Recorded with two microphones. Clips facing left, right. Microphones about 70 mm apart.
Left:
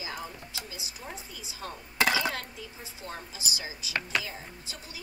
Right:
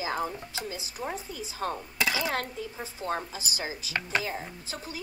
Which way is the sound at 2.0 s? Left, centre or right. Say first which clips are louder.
Left 3 dB; left.